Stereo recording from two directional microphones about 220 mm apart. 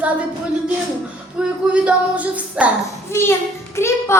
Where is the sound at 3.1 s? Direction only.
10° left (ahead or behind).